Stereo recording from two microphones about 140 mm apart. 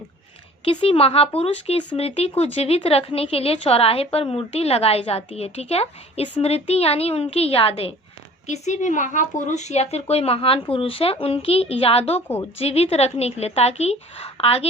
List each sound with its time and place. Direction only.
0.6 s a woman's voice: 40° left (ahead or behind)
8.4 s a woman's voice: 55° left (ahead or behind)